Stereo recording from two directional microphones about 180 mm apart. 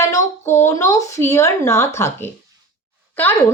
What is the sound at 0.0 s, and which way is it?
A woman's voice, 15° left (ahead or behind).